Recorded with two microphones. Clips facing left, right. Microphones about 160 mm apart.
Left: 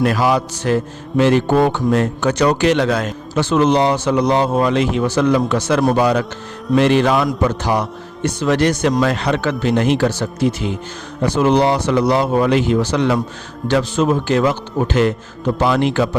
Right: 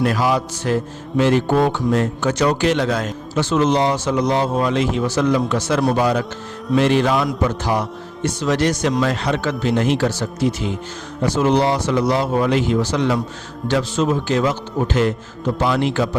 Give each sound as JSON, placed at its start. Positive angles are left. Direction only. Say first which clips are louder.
{"t": 0.0, "sound": "music", "louder": "left 2 dB", "side_deg": 70}
{"t": 7.6, "sound": "speech", "louder": "left 2 dB", "side_deg": 70}
{"t": 9.0, "sound": "speech", "louder": "left 2 dB", "side_deg": 65}
{"t": 15.5, "sound": "music", "louder": "left 3 dB", "side_deg": 65}